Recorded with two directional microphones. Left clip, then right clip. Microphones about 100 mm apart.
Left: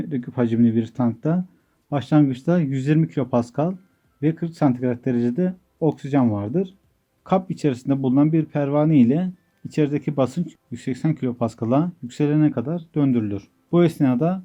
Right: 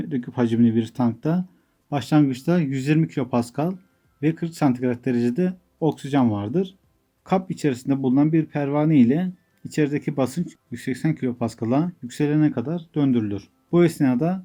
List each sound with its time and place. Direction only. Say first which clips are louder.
0.0 s speech: even; 30° left (ahead or behind)